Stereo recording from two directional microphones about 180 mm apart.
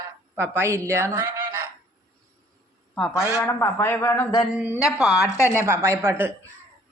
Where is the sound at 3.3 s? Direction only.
15° left (ahead or behind).